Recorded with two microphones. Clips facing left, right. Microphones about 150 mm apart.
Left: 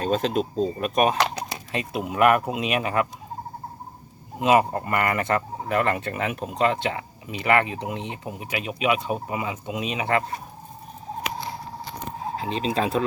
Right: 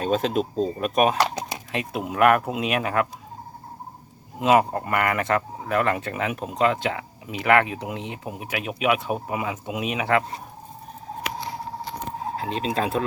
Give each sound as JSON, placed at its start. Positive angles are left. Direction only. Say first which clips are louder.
{"t": 0.0, "sound": "speech", "louder": "even", "side_deg": 0}
{"t": 4.4, "sound": "speech", "louder": "even", "side_deg": 0}
{"t": 12.4, "sound": "speech", "louder": "left 1 dB", "side_deg": 0}